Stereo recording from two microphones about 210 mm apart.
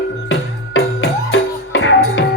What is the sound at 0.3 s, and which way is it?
Music, 60° left (ahead or behind).